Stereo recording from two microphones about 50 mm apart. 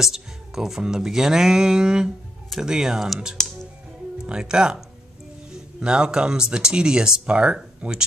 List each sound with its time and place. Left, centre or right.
0.0 s speech: centre